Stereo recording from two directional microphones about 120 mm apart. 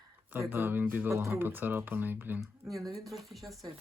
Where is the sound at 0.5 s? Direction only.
15° right (ahead or behind).